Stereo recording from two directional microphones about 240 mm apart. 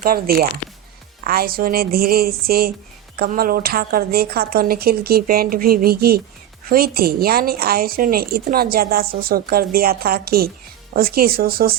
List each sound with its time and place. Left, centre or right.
0.0 s a woman's voice: right